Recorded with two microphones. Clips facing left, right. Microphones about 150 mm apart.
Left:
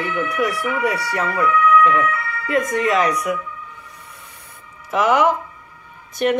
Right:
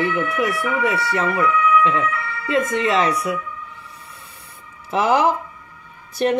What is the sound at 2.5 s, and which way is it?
Speech, 25° right (ahead or behind).